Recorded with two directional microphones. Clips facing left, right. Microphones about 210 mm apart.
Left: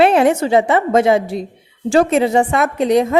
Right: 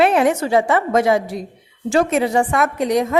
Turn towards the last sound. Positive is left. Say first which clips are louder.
# left 4 dB
turn(degrees=25)  # may be behind; listen again after turning